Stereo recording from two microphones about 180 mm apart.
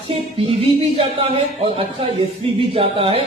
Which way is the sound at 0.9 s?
30° right (ahead or behind).